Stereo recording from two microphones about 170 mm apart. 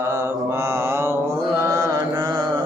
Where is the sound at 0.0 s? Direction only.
15° right (ahead or behind).